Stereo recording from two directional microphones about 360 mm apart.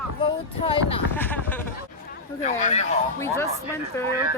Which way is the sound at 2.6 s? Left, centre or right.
Centre.